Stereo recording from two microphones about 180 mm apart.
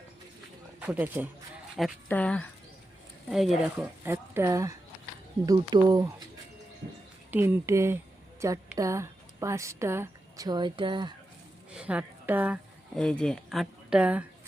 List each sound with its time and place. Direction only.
0.8 s speech: 10° right (ahead or behind)
2.0 s speech: 10° left (ahead or behind)
3.8 s speech: 10° right (ahead or behind)
7.3 s a woman's voice: 10° right (ahead or behind)
11.7 s a woman's voice: 5° right (ahead or behind)
13.0 s speech: 5° left (ahead or behind)